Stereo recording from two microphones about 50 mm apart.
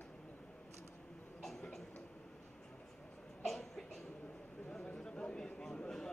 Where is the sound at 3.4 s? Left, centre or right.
Centre.